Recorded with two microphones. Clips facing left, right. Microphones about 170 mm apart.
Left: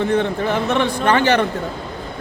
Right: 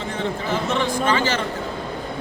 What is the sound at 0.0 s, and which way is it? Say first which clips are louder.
A man's voice: left 8 dB; 60° left (ahead or behind).